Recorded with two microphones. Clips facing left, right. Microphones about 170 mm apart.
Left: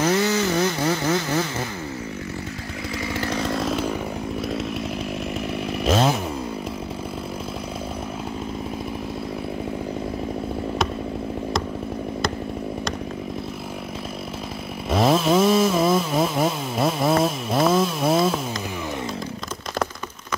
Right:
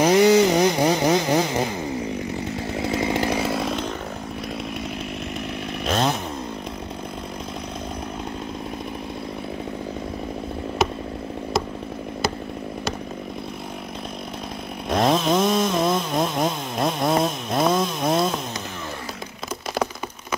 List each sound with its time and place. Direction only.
0.0 s vehicle: 15° right (ahead or behind)
2.8 s chainsaw: 25° right (ahead or behind); by 3.9 s centre (ahead or behind)
5.9 s chainsaw: 5° left (ahead or behind)
14.9 s chainsaw: 5° left (ahead or behind)